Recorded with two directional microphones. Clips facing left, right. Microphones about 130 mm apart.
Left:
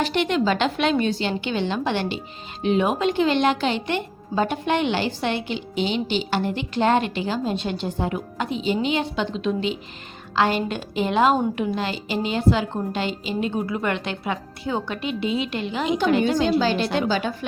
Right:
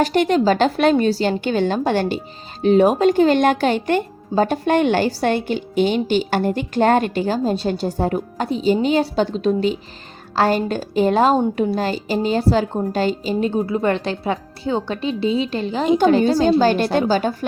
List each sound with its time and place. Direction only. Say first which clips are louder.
0.0 s a woman's voice: right 5 dB; 40° right (ahead or behind)